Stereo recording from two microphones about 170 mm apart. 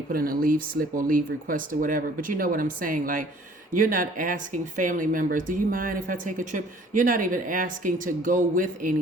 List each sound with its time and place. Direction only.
0.1 s speech: 60° right (ahead or behind)